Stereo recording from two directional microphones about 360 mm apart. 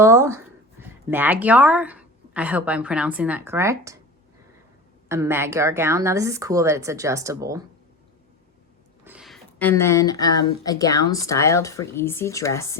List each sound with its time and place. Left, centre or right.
0.0 s a woman's voice: centre
5.0 s a woman's voice: centre
9.0 s a woman's voice: centre